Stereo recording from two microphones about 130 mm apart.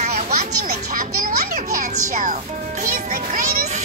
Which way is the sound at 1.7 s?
80° right.